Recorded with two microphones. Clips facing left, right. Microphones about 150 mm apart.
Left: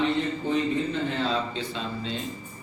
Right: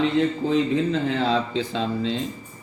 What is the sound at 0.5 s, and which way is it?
A man's voice, 90° right.